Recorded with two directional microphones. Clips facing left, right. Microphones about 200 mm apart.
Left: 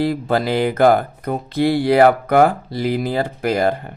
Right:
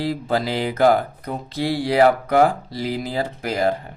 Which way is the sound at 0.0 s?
55° left (ahead or behind).